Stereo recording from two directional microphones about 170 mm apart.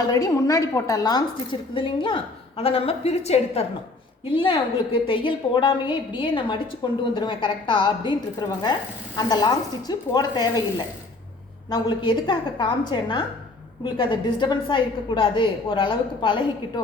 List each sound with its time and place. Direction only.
0.0 s a woman's voice: 20° left (ahead or behind)
11.7 s a woman's voice: 25° left (ahead or behind)